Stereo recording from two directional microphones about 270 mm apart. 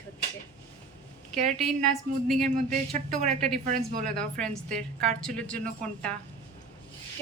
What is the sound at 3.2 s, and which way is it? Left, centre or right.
Speech, right.